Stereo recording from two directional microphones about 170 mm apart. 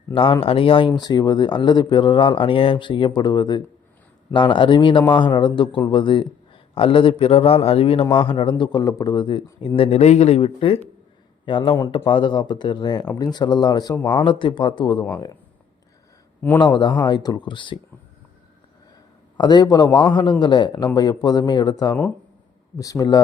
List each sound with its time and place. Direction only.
0.1 s speech: 30° left (ahead or behind)
16.6 s speech: 25° left (ahead or behind)
19.4 s speech: 25° left (ahead or behind)